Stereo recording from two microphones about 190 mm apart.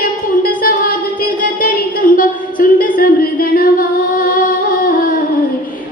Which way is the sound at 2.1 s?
45° left (ahead or behind).